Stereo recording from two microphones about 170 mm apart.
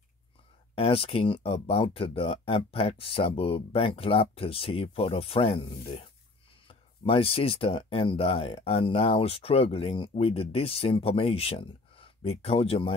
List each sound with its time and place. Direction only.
0.7 s speech: 35° left (ahead or behind)